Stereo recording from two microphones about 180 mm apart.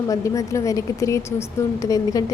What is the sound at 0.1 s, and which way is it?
A woman's voice, 15° left (ahead or behind).